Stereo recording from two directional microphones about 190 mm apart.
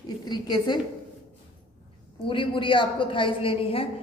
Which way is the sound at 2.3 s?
25° left (ahead or behind).